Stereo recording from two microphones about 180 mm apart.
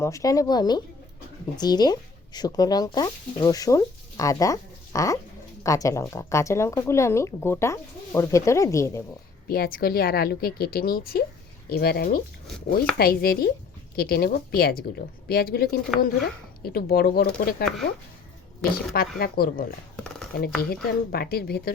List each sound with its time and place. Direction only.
0.0 s speech: 20° left (ahead or behind)
9.5 s speech: 55° left (ahead or behind)
18.9 s speech: 55° left (ahead or behind)
20.0 s a sound: 5° left (ahead or behind)
20.6 s speech: 60° left (ahead or behind)